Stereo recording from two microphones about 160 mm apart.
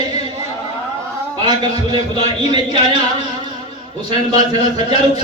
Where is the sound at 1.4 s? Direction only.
25° right (ahead or behind).